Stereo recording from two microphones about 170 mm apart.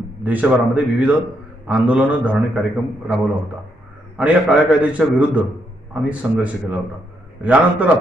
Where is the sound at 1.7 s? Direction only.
10° right (ahead or behind).